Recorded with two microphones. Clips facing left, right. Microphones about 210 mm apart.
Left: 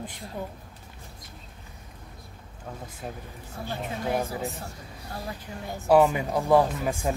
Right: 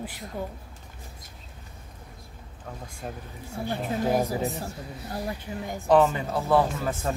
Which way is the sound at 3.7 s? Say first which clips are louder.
Right 4 dB; 15° right (ahead or behind).